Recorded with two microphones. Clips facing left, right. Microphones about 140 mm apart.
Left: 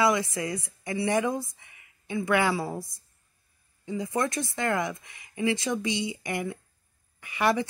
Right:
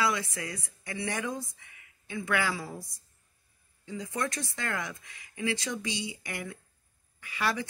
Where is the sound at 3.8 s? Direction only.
15° left (ahead or behind).